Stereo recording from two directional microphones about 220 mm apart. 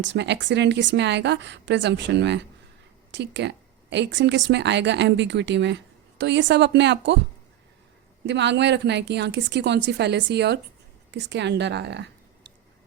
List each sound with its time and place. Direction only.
0.0 s speech: 55° right (ahead or behind)
8.3 s speech: 50° right (ahead or behind)